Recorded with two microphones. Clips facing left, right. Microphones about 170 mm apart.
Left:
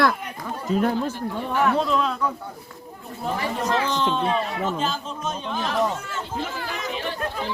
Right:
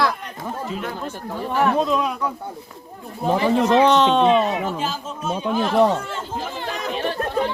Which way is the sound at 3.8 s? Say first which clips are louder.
Right 9 dB; 70° right (ahead or behind).